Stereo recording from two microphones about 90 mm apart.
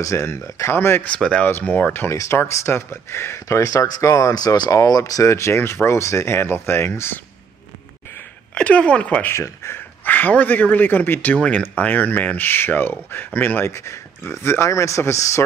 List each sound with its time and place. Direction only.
0.0 s speech: 30° left (ahead or behind)
1.0 s speech: 10° left (ahead or behind)
2.0 s speech: 30° left (ahead or behind)
8.5 s speech: 15° left (ahead or behind)
9.3 s speech: 30° left (ahead or behind)